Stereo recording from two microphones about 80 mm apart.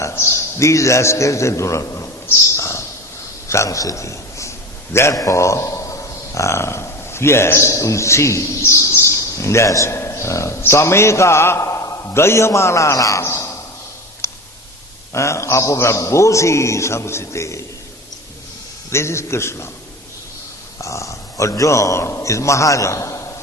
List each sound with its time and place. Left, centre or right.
0.6 s a man's voice: left
2.6 s a sound: left
3.5 s a man's voice: left
14.2 s a sound: left
15.1 s a man's voice: left
18.9 s a man's voice: left
20.7 s a man's voice: left